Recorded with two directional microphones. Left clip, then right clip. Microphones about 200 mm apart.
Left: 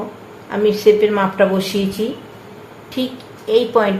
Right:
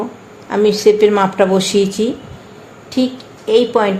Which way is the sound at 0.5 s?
40° right (ahead or behind).